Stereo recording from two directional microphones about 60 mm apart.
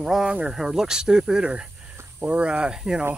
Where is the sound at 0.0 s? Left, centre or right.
Centre.